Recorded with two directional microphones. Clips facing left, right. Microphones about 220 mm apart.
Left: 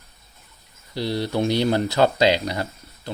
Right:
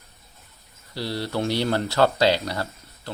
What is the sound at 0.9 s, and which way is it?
Speech, 20° left (ahead or behind).